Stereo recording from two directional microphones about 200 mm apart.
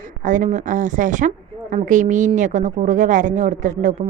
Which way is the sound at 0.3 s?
40° right (ahead or behind).